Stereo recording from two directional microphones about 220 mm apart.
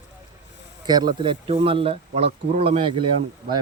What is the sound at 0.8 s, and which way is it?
Speech, 20° right (ahead or behind).